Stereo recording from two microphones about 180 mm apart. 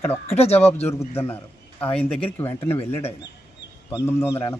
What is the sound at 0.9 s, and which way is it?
A man's voice, 15° left (ahead or behind).